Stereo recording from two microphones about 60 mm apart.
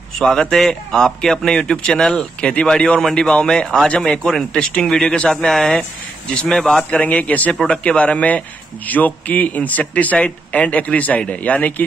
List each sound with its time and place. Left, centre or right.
0.2 s speech: centre
4.9 s speech: centre
5.7 s speech: centre
6.9 s speech: left